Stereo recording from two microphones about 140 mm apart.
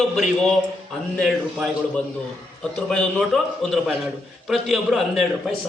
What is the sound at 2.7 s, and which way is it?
A man's voice, 5° left (ahead or behind).